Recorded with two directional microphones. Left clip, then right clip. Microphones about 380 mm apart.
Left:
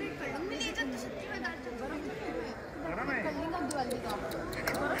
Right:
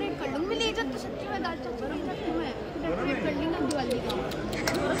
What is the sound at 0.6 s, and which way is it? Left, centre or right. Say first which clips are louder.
Chatter: right 6 dB; centre.